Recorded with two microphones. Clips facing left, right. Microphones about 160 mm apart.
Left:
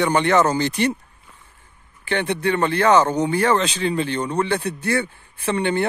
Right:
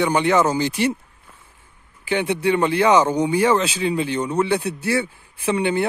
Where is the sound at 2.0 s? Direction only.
10° right (ahead or behind).